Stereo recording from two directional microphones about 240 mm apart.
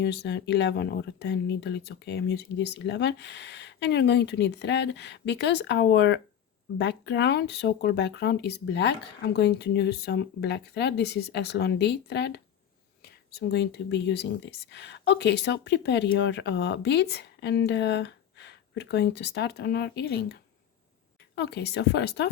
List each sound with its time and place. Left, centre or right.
0.0 s speech: left
21.3 s speech: left